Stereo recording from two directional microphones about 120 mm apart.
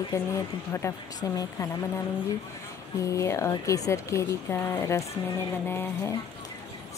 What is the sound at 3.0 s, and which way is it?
Speech, 25° left (ahead or behind).